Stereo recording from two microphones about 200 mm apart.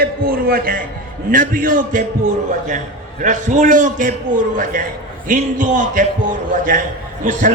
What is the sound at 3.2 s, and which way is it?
A man's voice, 40° right (ahead or behind).